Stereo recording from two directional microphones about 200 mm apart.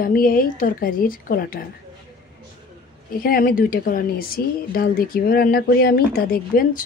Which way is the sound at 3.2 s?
45° left (ahead or behind).